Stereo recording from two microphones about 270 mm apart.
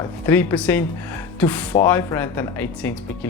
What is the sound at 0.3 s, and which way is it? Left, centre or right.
Speech, centre.